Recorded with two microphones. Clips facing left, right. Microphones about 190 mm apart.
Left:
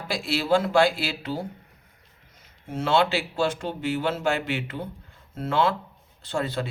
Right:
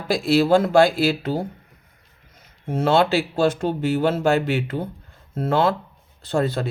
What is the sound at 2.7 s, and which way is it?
A man's voice, 40° right (ahead or behind).